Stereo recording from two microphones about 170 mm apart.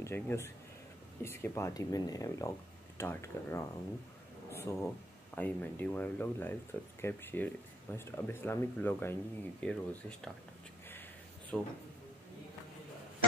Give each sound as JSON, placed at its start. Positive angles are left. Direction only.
{"t": 0.0, "sound": "speech", "side_deg": 15}
{"t": 11.5, "sound": "speech", "side_deg": 10}